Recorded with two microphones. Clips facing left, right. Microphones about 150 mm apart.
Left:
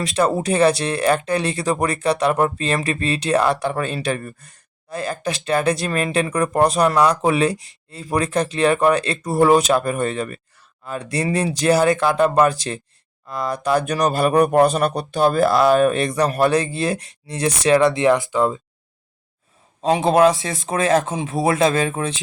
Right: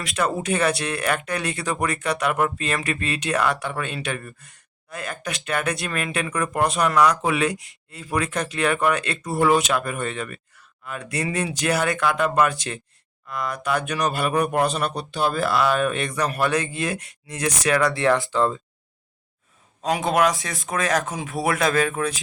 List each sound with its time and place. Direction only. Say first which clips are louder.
0.0 s speech: left 5 dB; 30° left (ahead or behind); by 18.6 s 15° left (ahead or behind)
19.8 s speech: left 6 dB; 30° left (ahead or behind)